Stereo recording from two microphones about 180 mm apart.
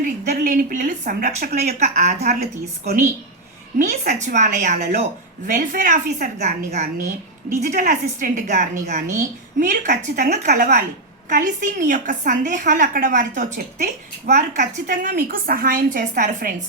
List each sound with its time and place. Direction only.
0.0 s a woman's voice: 50° right (ahead or behind)
2.3 s a woman's voice: 55° right (ahead or behind)
3.8 s a woman's voice: 45° right (ahead or behind)